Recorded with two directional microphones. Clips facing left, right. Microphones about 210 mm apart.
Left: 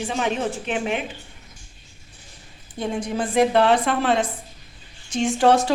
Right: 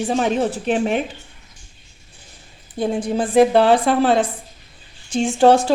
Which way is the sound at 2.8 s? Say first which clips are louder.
Right 5 dB; 30° right (ahead or behind).